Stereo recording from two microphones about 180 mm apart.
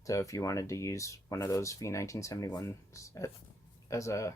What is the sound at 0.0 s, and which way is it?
Speech, 20° left (ahead or behind).